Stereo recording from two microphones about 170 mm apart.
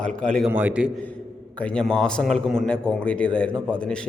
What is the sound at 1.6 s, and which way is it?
A man's voice, 5° left (ahead or behind).